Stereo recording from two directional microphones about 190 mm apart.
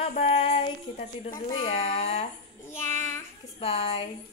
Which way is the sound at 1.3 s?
20° left (ahead or behind).